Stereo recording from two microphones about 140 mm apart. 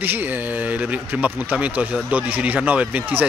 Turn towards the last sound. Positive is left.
turn(degrees=-10)  # may be behind; listen again after turning